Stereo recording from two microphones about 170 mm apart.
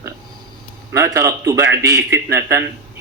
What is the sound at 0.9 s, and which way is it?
Speech, 15° right (ahead or behind).